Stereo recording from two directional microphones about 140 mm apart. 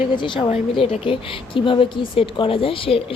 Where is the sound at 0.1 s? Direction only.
35° left (ahead or behind).